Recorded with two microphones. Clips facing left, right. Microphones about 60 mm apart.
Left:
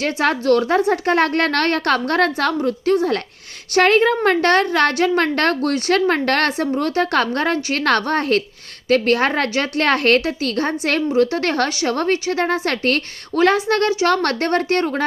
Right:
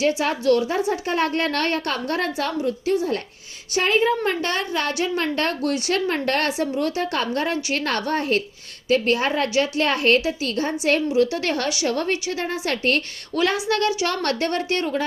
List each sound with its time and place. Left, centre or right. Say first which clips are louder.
0.0 s a woman's voice: left 2 dB; left